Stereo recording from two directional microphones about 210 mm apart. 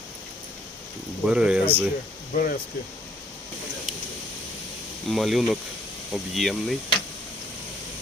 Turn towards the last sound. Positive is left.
turn(degrees=0)  # may be behind; listen again after turning